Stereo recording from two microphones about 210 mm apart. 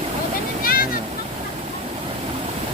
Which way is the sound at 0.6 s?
45° left (ahead or behind).